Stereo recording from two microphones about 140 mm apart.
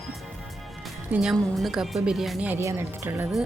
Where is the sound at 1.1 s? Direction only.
Centre (ahead or behind).